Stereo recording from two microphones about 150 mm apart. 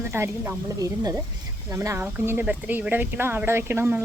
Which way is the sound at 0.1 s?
15° right (ahead or behind).